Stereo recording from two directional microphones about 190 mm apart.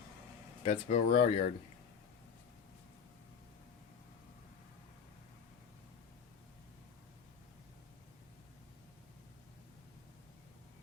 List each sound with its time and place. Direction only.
0.6 s speech: 35° left (ahead or behind)
1.1 s speech: 45° left (ahead or behind)